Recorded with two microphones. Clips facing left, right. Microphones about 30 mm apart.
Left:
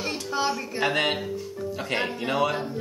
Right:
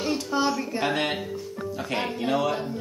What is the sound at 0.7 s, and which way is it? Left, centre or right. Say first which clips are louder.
Speech: left 5 dB; left.